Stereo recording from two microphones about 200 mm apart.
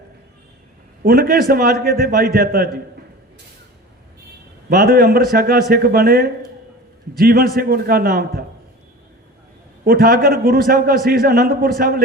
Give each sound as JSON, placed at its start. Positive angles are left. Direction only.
{"t": 1.0, "sound": "a man's voice", "side_deg": -50}
{"t": 4.7, "sound": "a man's voice", "side_deg": -45}
{"t": 9.8, "sound": "a man's voice", "side_deg": -45}